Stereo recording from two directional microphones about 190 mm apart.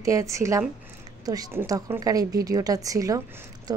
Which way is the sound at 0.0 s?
15° right (ahead or behind).